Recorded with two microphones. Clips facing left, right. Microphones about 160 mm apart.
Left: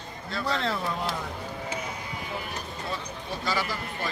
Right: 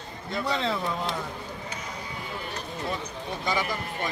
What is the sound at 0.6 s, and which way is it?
Speech, centre (ahead or behind).